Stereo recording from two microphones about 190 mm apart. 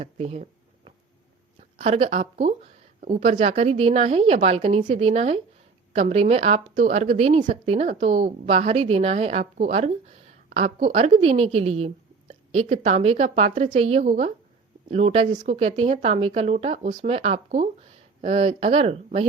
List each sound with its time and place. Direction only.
0.0 s a woman's voice: 35° right (ahead or behind)
1.8 s a woman's voice: 35° right (ahead or behind)